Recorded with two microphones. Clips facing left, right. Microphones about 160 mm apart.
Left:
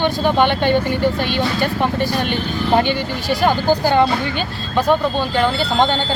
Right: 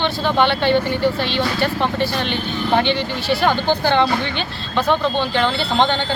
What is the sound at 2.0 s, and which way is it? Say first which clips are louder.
Speech: left 1 dB; 45° left (ahead or behind).